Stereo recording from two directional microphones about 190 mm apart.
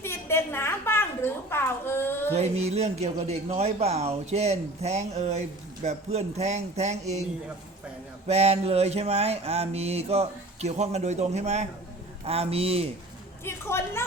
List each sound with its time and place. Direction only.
0.0 s a sound: 15° left (ahead or behind)
2.3 s speech: 35° right (ahead or behind)
8.3 s speech: 35° right (ahead or behind)
13.4 s a woman's voice: 15° left (ahead or behind)